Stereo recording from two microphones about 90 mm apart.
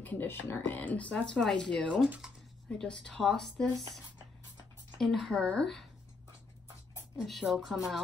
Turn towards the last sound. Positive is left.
turn(degrees=0)  # may be behind; listen again after turning